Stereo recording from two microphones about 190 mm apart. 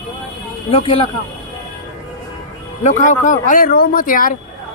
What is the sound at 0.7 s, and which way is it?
Speech, 30° left (ahead or behind).